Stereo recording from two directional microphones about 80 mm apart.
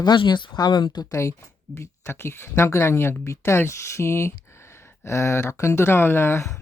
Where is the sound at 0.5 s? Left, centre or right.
Left.